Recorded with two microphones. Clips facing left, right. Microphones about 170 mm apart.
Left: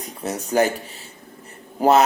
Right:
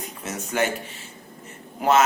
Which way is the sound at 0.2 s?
35° left (ahead or behind).